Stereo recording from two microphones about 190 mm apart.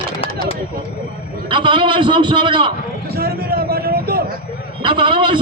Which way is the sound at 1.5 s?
25° right (ahead or behind).